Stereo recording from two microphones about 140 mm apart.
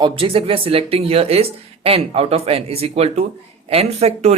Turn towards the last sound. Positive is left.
turn(degrees=-50)  # may be behind; listen again after turning